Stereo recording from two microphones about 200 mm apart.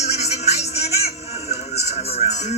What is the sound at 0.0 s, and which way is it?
Music, 35° left (ahead or behind).